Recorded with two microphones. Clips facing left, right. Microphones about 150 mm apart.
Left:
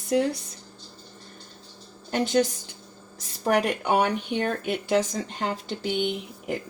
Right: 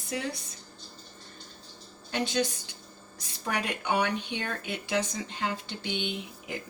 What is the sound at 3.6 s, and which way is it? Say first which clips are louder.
Speech: left 6 dB; 55° left (ahead or behind).